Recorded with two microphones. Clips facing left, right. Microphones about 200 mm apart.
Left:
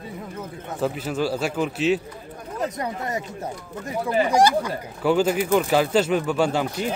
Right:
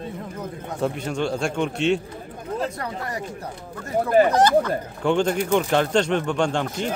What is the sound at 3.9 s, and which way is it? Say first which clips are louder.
Speech: right 5 dB; 50° right (ahead or behind).